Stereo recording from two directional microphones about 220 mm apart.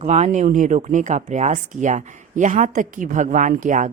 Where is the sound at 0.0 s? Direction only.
30° right (ahead or behind).